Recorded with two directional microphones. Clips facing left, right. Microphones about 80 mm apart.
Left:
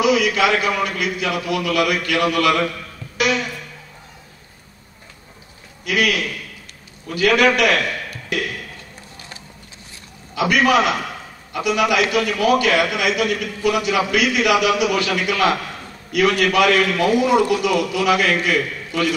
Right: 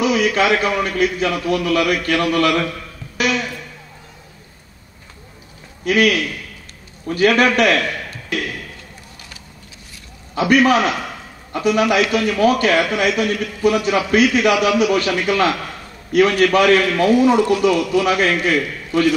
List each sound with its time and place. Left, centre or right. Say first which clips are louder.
0.0 s a man's voice: even; right
5.9 s a man's voice: right 4 dB; right
10.5 s a man's voice: right 2 dB; right